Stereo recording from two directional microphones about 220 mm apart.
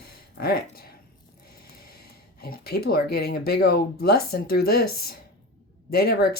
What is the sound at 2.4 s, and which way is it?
Speech, 45° left (ahead or behind).